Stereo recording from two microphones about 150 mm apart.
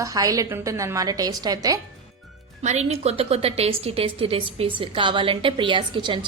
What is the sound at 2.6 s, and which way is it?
A woman's voice, 50° right (ahead or behind).